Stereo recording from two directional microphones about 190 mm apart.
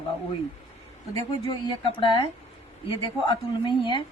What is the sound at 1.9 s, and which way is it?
Speech, 25° left (ahead or behind).